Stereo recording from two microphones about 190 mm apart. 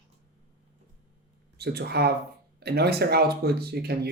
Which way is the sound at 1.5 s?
60° right (ahead or behind).